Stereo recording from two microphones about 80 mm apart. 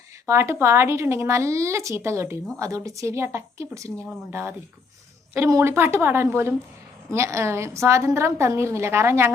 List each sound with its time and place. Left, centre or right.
0.3 s a woman's voice: right
4.3 s a woman's voice: right